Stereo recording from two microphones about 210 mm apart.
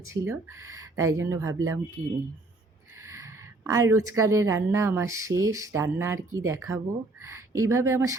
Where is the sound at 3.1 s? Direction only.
15° right (ahead or behind).